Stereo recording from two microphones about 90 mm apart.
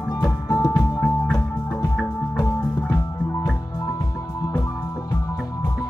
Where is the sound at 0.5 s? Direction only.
35° left (ahead or behind).